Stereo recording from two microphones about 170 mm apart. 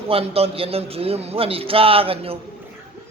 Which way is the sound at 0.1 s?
35° right (ahead or behind).